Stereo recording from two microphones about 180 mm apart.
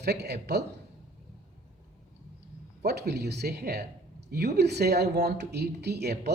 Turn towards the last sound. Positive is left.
turn(degrees=-65)  # may be behind; listen again after turning